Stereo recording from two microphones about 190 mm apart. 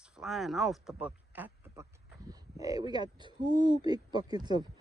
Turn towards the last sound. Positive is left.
turn(degrees=-20)  # may be behind; listen again after turning